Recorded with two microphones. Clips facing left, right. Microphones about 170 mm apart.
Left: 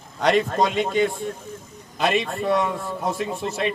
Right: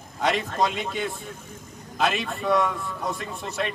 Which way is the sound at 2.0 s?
Centre (ahead or behind).